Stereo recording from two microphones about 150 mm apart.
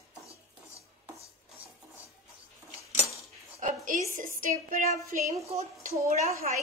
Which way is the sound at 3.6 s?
60° right (ahead or behind).